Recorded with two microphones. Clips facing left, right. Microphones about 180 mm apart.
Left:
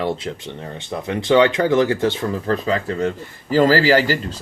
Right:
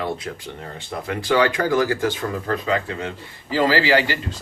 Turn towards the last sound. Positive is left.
turn(degrees=40)  # may be behind; listen again after turning